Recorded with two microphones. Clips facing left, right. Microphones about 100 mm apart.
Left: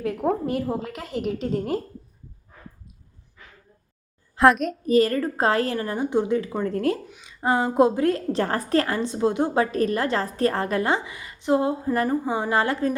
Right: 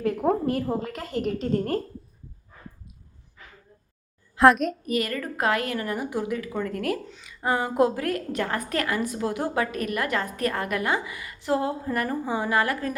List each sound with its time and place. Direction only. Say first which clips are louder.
0.0 s a woman's voice: right 1 dB; centre (ahead or behind)
4.4 s a child's voice: even; centre (ahead or behind)
4.9 s a woman's voice: left 8 dB; 30° left (ahead or behind)